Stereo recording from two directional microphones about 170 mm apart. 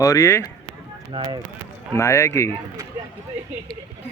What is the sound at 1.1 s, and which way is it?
Speech, 30° right (ahead or behind).